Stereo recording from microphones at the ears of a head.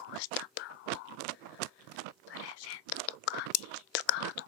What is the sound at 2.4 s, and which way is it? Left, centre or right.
Whispering, left.